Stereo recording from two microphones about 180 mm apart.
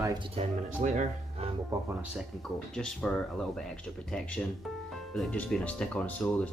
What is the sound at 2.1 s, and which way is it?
Speech, centre (ahead or behind).